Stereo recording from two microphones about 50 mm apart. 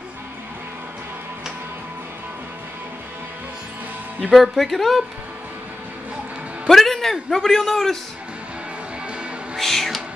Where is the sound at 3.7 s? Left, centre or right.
Right.